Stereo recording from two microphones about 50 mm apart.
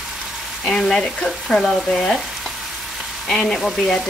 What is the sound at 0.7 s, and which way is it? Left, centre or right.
Speech, centre.